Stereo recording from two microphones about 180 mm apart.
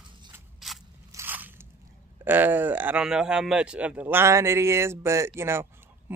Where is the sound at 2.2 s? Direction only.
10° right (ahead or behind).